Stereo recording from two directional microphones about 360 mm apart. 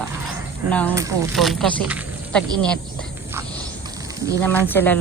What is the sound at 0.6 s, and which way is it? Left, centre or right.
Speech, centre.